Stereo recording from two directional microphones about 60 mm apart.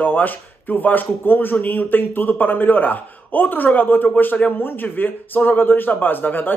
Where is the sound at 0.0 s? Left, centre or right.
Left.